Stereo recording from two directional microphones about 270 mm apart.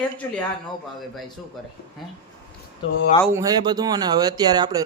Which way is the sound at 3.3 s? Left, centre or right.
Centre.